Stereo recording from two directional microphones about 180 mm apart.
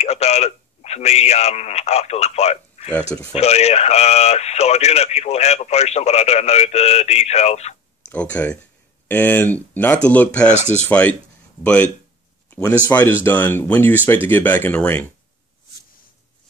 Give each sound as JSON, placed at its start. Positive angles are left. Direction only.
{"t": 0.0, "sound": "speech", "side_deg": 35}
{"t": 2.9, "sound": "speech", "side_deg": 5}
{"t": 3.3, "sound": "a man's voice", "side_deg": 35}
{"t": 8.1, "sound": "speech", "side_deg": 10}
{"t": 10.5, "sound": "a man's voice", "side_deg": 40}
{"t": 10.9, "sound": "speech", "side_deg": 10}